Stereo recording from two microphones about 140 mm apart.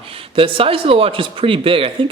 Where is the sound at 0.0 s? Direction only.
40° right (ahead or behind).